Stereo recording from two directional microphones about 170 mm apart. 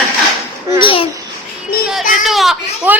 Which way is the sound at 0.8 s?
30° left (ahead or behind).